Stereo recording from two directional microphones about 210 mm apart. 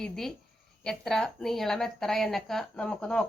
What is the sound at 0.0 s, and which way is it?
A woman's voice, centre (ahead or behind).